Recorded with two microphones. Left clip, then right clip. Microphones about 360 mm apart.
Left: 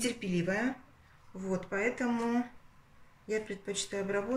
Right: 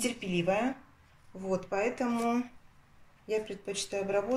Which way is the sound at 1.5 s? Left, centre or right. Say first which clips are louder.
Right 2 dB; centre.